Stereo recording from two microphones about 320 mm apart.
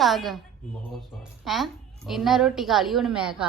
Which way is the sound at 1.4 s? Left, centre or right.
Centre.